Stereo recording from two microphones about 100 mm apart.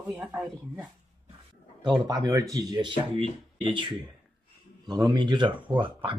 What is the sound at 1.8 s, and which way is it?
Speech, 45° right (ahead or behind).